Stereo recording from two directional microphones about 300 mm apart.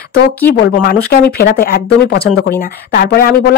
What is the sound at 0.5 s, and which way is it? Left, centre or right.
Speech, left.